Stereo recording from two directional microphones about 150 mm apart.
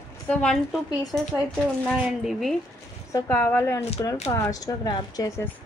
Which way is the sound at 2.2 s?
Centre (ahead or behind).